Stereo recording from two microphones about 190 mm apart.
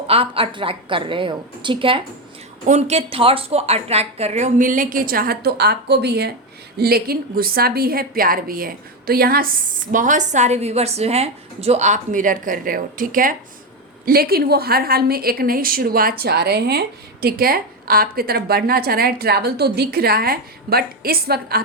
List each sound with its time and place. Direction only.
0.1 s a woman's voice: 30° right (ahead or behind)
2.6 s a woman's voice: 35° right (ahead or behind); by 21.6 s 55° right (ahead or behind)